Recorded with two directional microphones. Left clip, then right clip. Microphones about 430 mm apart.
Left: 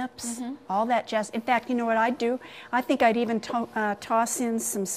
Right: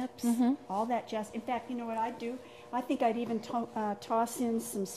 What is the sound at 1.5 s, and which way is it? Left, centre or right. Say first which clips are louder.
Speech: left 12 dB; left.